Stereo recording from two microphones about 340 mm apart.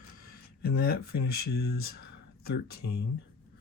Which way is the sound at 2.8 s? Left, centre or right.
Left.